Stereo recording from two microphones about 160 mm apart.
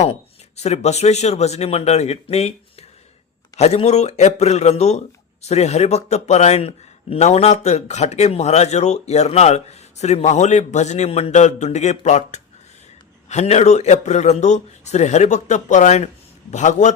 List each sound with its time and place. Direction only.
0.0 s speech: 45° left (ahead or behind)
3.6 s speech: 45° left (ahead or behind)